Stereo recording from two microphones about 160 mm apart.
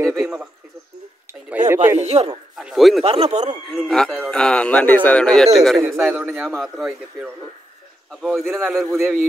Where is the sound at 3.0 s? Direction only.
40° right (ahead or behind).